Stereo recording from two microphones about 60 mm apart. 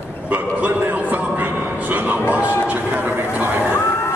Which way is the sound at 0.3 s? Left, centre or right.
Right.